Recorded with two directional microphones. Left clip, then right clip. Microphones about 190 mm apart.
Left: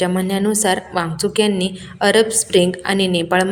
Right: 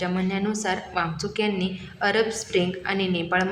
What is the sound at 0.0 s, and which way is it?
A woman's voice, 30° left (ahead or behind).